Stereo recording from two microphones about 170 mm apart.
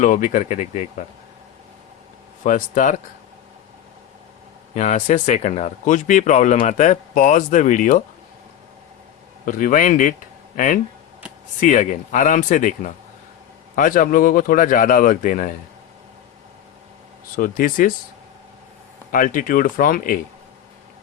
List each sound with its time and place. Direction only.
0.0 s speech: 50° left (ahead or behind)
2.4 s speech: 50° left (ahead or behind)
4.7 s speech: 45° left (ahead or behind)
9.5 s speech: 50° left (ahead or behind)
11.6 s speech: 45° left (ahead or behind)
17.3 s speech: 55° left (ahead or behind)
19.1 s speech: 50° left (ahead or behind)